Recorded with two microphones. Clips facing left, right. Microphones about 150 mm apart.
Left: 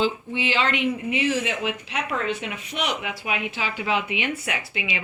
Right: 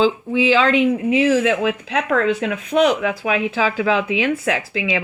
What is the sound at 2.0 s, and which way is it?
Speech, 90° right.